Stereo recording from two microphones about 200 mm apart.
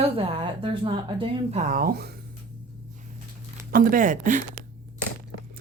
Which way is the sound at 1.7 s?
45° right (ahead or behind).